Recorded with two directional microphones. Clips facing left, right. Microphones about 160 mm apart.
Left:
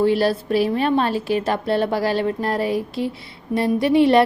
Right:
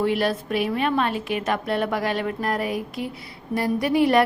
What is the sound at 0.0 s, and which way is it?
A woman's voice, 30° left (ahead or behind).